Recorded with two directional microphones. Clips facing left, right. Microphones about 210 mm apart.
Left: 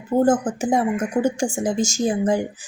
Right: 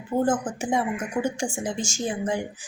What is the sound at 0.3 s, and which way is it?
Speech, 40° left (ahead or behind).